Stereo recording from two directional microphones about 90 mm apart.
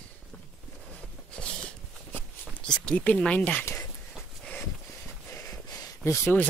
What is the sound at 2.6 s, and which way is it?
Speech, 10° left (ahead or behind).